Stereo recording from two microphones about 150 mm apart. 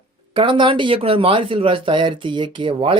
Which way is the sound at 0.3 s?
35° right (ahead or behind).